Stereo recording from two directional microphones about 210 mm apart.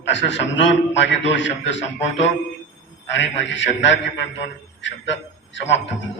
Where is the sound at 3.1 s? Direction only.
60° left (ahead or behind).